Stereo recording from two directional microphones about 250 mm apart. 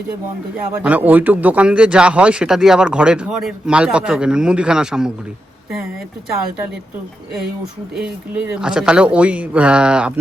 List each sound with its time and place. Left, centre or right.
0.7 s speech: centre
7.9 s speech: centre